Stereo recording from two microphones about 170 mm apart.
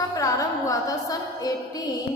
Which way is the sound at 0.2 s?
20° left (ahead or behind).